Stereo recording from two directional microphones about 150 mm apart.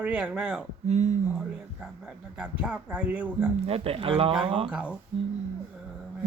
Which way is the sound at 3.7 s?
40° right (ahead or behind).